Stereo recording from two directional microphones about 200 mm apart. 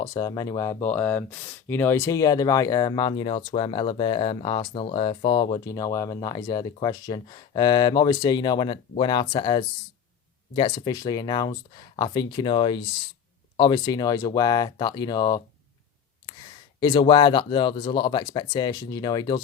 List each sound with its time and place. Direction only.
0.0 s speech: 20° left (ahead or behind)
16.8 s speech: 20° left (ahead or behind)